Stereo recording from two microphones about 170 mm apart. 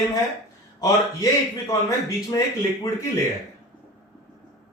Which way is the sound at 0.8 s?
20° left (ahead or behind).